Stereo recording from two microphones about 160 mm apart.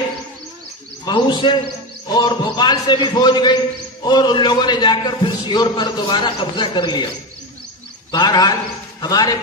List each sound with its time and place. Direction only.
1.0 s a man's voice: 30° left (ahead or behind)
8.1 s a man's voice: 25° left (ahead or behind)